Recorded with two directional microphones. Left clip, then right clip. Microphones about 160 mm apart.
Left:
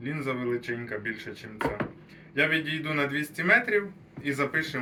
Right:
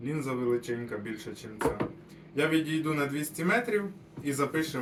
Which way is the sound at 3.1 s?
10° right (ahead or behind).